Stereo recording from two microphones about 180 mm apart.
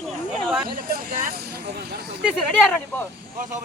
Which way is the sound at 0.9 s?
55° right (ahead or behind).